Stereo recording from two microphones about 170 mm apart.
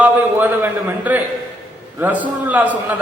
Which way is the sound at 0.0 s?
10° right (ahead or behind).